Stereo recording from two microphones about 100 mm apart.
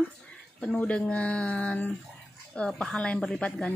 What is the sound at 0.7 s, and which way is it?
Speech, 10° left (ahead or behind).